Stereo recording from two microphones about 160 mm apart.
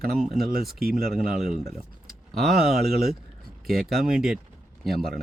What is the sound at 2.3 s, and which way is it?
Speech, centre (ahead or behind).